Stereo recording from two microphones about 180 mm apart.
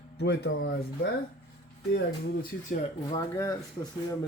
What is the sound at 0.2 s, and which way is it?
Speech, 70° left (ahead or behind).